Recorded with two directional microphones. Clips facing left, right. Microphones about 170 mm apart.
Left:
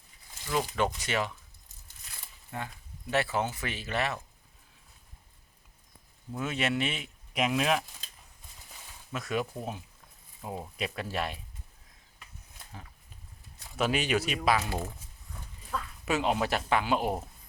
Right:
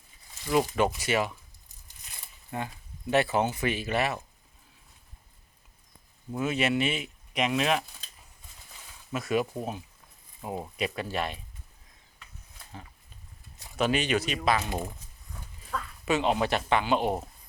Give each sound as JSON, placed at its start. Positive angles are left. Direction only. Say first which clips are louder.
{"t": 0.5, "sound": "speech", "louder": "right 4 dB", "side_deg": -10}
{"t": 2.0, "sound": "a sound", "louder": "right 5 dB", "side_deg": -20}
{"t": 3.1, "sound": "speech", "louder": "right 4 dB", "side_deg": -20}
{"t": 6.3, "sound": "speech", "louder": "right 4 dB", "side_deg": -5}
{"t": 9.1, "sound": "speech", "louder": "right 4 dB", "side_deg": -5}
{"t": 13.7, "sound": "speech", "louder": "right 2 dB", "side_deg": 5}
{"t": 14.6, "sound": "speech", "louder": "right 1 dB", "side_deg": -15}
{"t": 15.7, "sound": "speech", "louder": "right 2 dB", "side_deg": 5}